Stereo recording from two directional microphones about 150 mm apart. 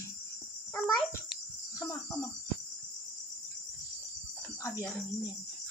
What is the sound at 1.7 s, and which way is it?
Cricket, 20° left (ahead or behind).